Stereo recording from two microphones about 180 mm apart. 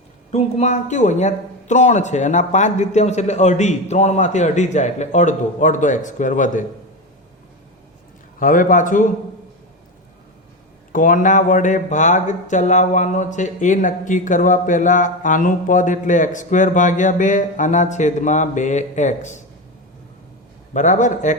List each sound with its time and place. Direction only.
0.3 s speech: 40° left (ahead or behind)
8.4 s speech: 50° left (ahead or behind)
10.9 s speech: 45° left (ahead or behind)
20.7 s speech: 45° left (ahead or behind)